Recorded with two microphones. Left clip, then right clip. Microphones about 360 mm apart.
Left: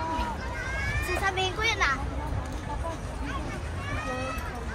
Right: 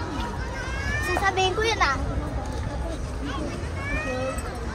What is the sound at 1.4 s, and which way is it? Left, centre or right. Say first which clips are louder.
Music: right 4 dB; right.